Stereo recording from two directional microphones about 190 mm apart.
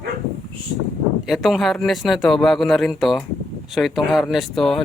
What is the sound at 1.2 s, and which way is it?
Speech, centre (ahead or behind).